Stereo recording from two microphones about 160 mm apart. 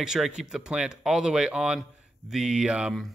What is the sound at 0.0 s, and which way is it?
Speech, 5° right (ahead or behind).